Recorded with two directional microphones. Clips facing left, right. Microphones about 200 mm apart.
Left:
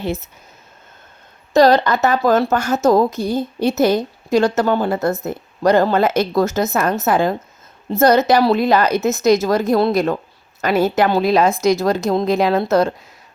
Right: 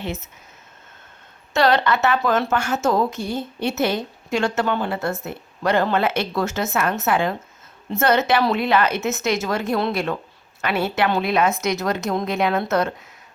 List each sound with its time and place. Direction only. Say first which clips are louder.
0.0 s a woman's voice: left 6 dB; 35° left (ahead or behind)
1.5 s a woman's voice: left 6 dB; 35° left (ahead or behind)